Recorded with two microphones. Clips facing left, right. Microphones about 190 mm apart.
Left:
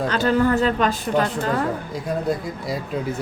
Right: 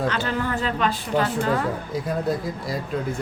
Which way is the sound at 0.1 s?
40° left (ahead or behind).